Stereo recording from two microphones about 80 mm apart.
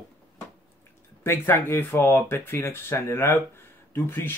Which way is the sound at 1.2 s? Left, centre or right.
Left.